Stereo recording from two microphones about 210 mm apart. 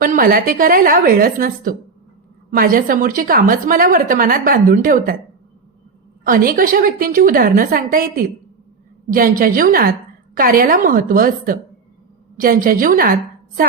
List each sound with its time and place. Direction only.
0.0 s a woman's voice: 40° right (ahead or behind)
6.2 s a woman's voice: 40° right (ahead or behind)